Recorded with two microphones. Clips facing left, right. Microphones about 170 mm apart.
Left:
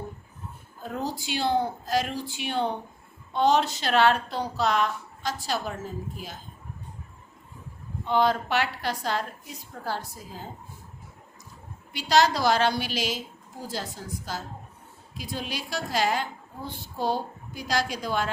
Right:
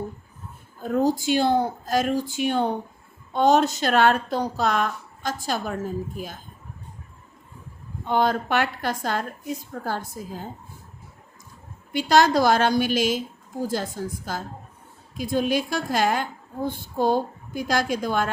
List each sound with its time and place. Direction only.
0.8 s a woman's voice: 50° right (ahead or behind)
8.0 s a woman's voice: 50° right (ahead or behind)
11.9 s a woman's voice: 50° right (ahead or behind)